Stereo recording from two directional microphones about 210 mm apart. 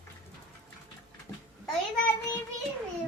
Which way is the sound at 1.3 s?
10° left (ahead or behind).